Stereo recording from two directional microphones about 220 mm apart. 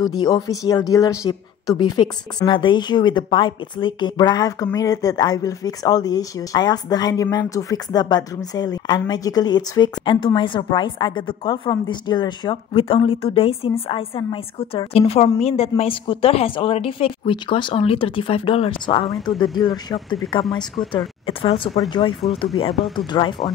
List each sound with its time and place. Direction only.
0.2 s speech: 15° left (ahead or behind)
21.3 s speech: 25° left (ahead or behind)